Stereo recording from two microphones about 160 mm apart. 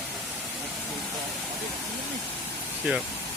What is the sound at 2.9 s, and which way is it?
Speech, 10° right (ahead or behind).